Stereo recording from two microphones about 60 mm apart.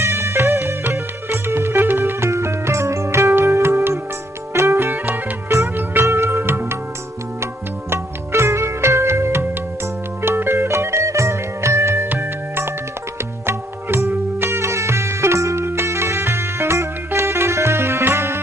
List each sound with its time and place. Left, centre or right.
0.0 s music: right
5.7 s music: right
6.1 s music: right
7.9 s music: right
12.0 s music: right
15.6 s music: right